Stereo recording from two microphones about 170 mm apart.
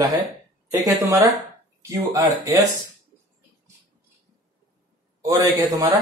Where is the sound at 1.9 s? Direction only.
20° right (ahead or behind).